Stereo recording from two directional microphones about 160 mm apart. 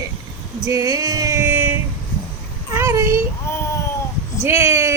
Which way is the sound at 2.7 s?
15° right (ahead or behind).